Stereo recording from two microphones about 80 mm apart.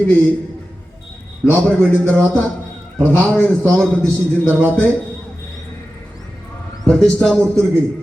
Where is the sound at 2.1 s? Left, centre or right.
Centre.